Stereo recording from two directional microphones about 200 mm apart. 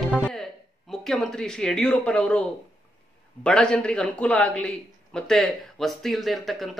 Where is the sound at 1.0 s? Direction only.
Centre (ahead or behind).